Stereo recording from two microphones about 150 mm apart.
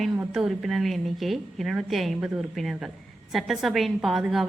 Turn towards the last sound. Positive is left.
turn(degrees=0)  # may be behind; listen again after turning